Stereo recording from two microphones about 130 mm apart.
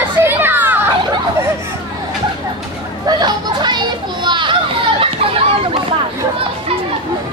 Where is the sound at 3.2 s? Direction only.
35° right (ahead or behind).